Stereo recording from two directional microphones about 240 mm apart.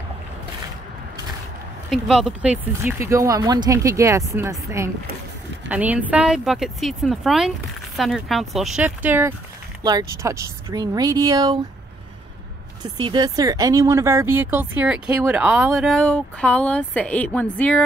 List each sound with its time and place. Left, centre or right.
1.9 s speech: centre
12.8 s speech: centre